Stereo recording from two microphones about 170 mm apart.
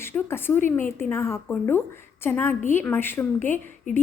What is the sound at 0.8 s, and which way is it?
A woman's voice, 15° left (ahead or behind).